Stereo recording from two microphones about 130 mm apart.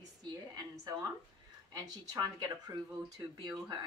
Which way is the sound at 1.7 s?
30° right (ahead or behind).